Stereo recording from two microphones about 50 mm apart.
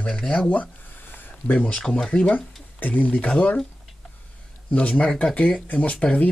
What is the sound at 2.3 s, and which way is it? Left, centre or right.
Speech, left.